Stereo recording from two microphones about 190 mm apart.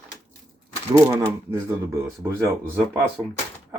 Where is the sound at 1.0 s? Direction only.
15° right (ahead or behind).